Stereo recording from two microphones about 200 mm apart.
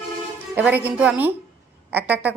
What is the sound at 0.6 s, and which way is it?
A woman's voice, 10° right (ahead or behind).